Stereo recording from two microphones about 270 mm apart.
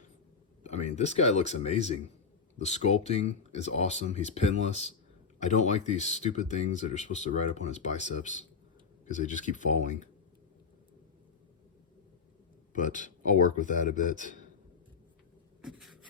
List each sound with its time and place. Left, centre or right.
0.6 s speech: left
12.7 s speech: left